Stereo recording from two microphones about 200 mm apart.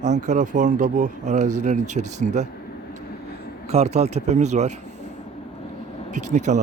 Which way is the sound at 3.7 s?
35° right (ahead or behind).